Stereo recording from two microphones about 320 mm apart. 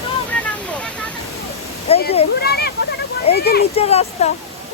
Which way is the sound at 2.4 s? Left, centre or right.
Left.